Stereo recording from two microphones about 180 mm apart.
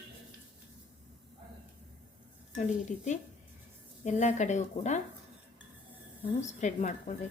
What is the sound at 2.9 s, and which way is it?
A woman's voice, 45° left (ahead or behind).